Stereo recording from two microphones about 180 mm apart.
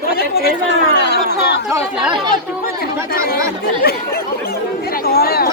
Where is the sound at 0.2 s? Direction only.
65° left (ahead or behind).